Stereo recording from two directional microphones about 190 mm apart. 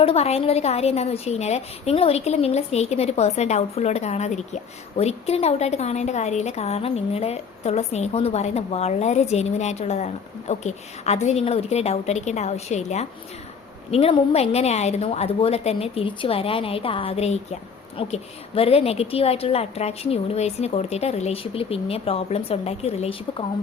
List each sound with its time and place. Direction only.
0.0 s a woman's voice: 30° left (ahead or behind)